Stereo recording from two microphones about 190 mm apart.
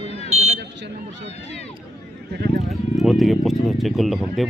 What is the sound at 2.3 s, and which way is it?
Speech, 60° right (ahead or behind).